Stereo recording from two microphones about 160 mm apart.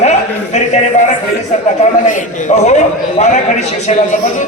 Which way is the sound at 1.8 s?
50° left (ahead or behind).